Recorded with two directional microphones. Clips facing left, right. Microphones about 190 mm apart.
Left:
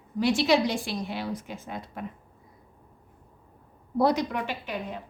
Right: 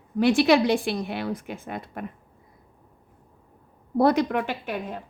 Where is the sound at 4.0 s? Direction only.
55° right (ahead or behind).